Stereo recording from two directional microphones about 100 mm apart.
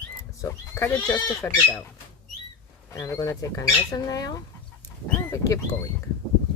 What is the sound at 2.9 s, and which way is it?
Speech, 35° left (ahead or behind).